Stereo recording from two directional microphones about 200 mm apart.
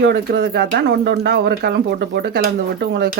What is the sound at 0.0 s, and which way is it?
Speech, 55° right (ahead or behind).